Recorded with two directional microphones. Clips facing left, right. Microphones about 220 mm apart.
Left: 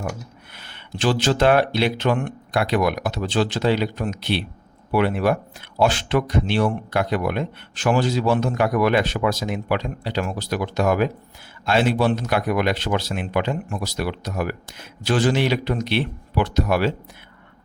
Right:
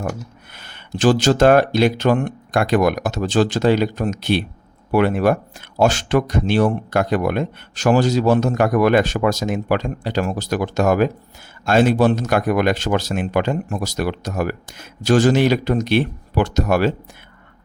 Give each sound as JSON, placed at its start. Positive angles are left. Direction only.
{"t": 0.5, "sound": "speech", "side_deg": -45}